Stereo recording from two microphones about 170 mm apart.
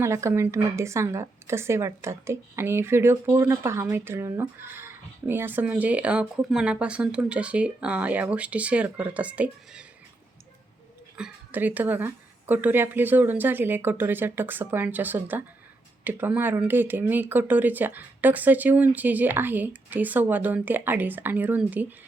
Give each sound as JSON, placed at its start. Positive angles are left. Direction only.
{"t": 0.0, "sound": "speech", "side_deg": -15}
{"t": 11.2, "sound": "speech", "side_deg": -10}